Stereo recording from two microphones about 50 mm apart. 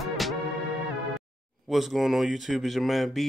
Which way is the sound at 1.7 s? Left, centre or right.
Centre.